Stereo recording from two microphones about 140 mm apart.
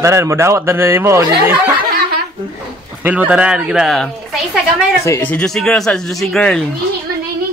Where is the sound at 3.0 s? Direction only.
10° right (ahead or behind).